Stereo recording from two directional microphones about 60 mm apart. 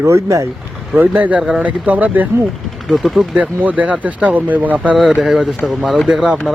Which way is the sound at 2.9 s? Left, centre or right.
Centre.